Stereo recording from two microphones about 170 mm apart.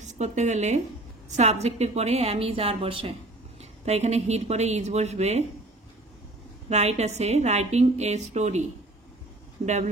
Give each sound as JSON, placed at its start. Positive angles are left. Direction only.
{"t": 0.0, "sound": "a woman's voice", "side_deg": -45}
{"t": 6.7, "sound": "a woman's voice", "side_deg": -40}